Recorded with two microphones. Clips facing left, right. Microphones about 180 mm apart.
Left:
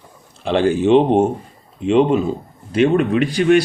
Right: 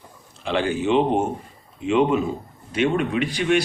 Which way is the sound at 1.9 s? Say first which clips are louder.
Left 5 dB; 35° left (ahead or behind).